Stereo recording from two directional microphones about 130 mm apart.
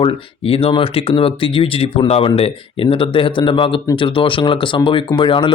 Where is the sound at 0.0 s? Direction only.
45° left (ahead or behind).